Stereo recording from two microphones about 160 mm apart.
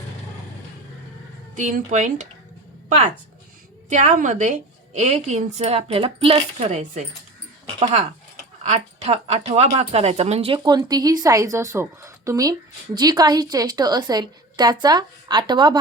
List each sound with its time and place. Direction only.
1.5 s speech: 50° right (ahead or behind)
3.8 s speech: 50° right (ahead or behind); by 15.8 s 25° right (ahead or behind)